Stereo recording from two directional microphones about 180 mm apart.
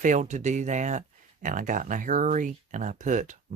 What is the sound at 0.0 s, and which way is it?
Speech, 45° right (ahead or behind).